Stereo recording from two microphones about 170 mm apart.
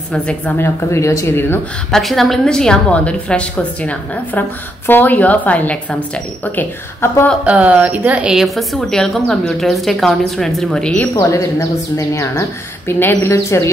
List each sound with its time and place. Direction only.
0.1 s a woman's voice: 10° left (ahead or behind)
2.0 s a woman's voice: centre (ahead or behind)
7.4 s a woman's voice: 10° right (ahead or behind)
11.1 s a woman's voice: 20° left (ahead or behind)